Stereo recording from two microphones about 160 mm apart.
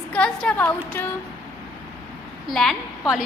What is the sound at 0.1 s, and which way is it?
A woman's voice, 10° left (ahead or behind).